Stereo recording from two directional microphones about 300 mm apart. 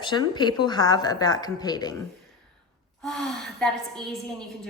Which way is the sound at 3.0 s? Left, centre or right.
Centre.